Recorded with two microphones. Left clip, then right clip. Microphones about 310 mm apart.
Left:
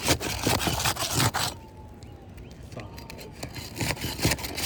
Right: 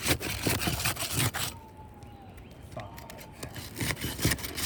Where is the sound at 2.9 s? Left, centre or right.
Centre.